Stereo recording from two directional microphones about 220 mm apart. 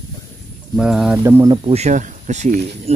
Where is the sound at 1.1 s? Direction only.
15° right (ahead or behind).